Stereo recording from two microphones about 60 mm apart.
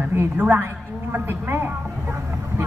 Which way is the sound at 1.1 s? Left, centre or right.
Right.